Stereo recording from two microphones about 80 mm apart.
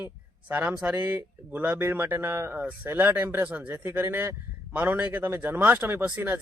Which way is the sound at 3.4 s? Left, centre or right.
Centre.